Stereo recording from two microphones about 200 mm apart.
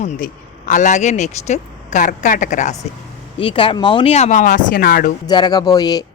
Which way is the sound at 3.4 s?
25° left (ahead or behind).